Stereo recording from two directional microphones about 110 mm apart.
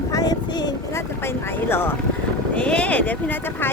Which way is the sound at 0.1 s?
35° left (ahead or behind).